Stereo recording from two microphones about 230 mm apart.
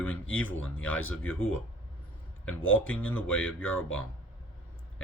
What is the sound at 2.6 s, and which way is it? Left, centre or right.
Speech, left.